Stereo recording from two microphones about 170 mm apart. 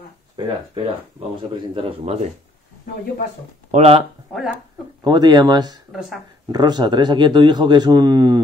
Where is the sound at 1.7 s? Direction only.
40° right (ahead or behind).